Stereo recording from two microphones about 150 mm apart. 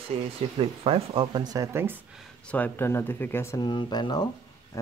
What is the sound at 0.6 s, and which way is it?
Speech, 40° right (ahead or behind).